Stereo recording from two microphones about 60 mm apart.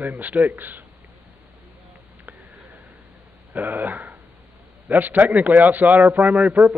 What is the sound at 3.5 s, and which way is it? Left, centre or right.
A man's voice, right.